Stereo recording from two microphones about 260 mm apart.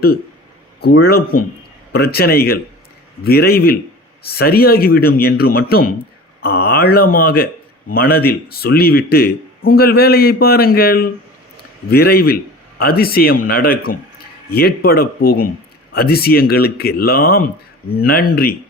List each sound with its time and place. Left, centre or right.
0.8 s speech: left